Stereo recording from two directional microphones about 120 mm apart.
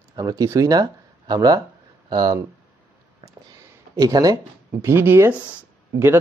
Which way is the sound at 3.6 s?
30° right (ahead or behind).